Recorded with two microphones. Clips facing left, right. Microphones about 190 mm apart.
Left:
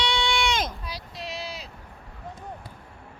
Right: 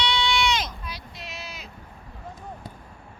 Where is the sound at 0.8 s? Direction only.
35° left (ahead or behind).